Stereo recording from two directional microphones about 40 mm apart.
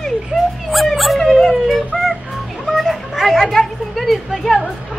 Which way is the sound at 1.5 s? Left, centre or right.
Centre.